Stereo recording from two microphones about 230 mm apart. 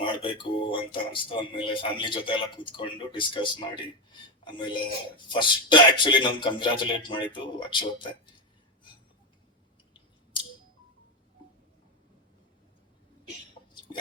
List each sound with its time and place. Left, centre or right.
0.0 s speech: left